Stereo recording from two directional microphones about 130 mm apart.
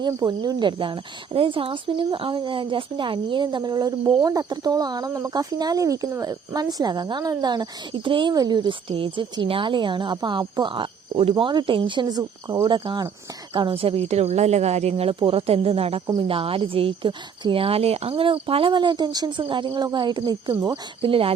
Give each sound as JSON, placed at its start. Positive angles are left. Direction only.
{"t": 0.1, "sound": "speech", "side_deg": -30}